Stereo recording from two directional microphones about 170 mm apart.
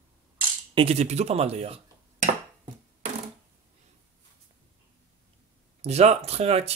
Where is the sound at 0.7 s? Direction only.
35° right (ahead or behind).